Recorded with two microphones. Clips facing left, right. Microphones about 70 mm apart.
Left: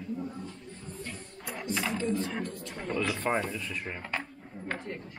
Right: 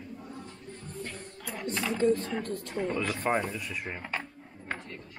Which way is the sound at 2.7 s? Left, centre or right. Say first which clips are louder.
Right 1 dB; centre.